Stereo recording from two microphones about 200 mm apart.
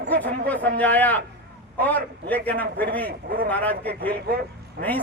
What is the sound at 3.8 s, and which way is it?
A man's voice, 50° right (ahead or behind).